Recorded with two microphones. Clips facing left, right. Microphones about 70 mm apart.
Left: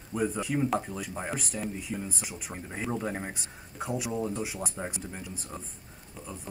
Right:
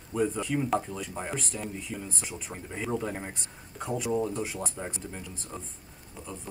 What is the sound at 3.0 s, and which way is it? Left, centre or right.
Speech, left.